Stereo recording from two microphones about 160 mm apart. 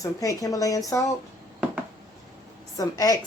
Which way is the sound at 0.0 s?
20° left (ahead or behind).